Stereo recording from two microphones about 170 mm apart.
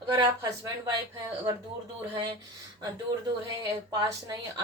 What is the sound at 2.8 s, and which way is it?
Speech, 25° right (ahead or behind).